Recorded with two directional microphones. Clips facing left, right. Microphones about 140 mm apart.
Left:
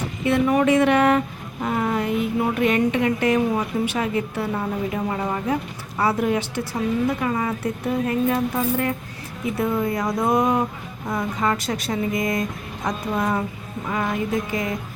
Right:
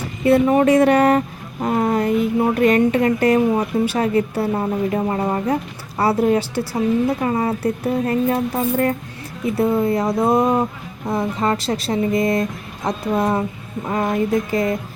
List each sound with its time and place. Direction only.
0.3 s speech: 35° right (ahead or behind)